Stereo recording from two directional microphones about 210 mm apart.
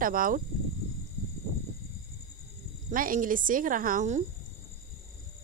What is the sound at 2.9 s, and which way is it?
Speech, 40° right (ahead or behind).